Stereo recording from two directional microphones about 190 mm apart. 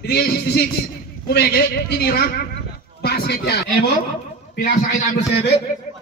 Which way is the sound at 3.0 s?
55° left (ahead or behind).